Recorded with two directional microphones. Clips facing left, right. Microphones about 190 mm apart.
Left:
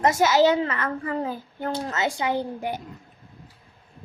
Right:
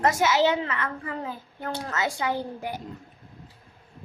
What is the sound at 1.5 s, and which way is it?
Speech, 25° left (ahead or behind).